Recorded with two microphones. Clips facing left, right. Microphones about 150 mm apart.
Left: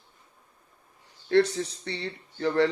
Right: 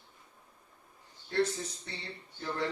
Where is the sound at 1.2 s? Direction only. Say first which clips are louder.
Left 9 dB; 80° left.